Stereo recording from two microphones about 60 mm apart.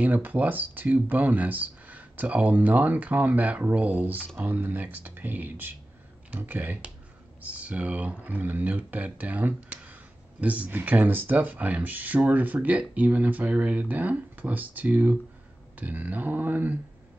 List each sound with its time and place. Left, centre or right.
0.0 s speech: right